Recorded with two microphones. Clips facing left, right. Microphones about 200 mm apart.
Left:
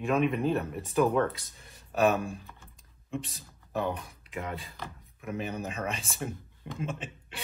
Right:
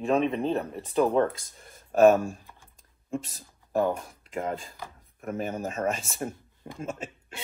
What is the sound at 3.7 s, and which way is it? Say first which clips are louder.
Speech: right 6 dB; 45° right (ahead or behind).